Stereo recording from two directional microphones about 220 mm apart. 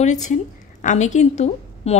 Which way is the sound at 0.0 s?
35° left (ahead or behind).